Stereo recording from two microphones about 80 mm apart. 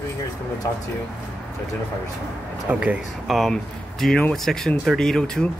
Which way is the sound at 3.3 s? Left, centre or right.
Centre.